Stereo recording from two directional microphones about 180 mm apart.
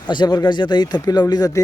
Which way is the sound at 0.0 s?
25° left (ahead or behind).